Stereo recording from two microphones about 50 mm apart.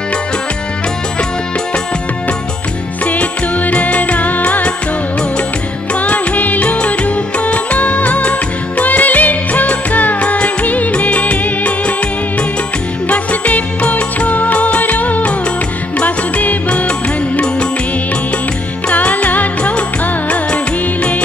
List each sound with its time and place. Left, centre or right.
3.1 s music: left
5.9 s music: left
13.1 s music: left
18.9 s music: left